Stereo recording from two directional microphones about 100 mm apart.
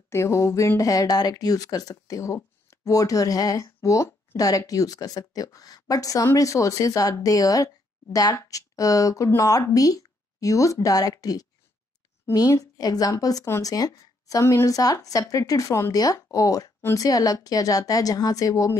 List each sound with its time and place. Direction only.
0.1 s a woman's voice: 30° left (ahead or behind)